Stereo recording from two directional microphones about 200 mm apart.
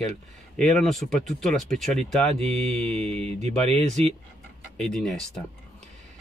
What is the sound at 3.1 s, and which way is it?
Speech, 30° right (ahead or behind).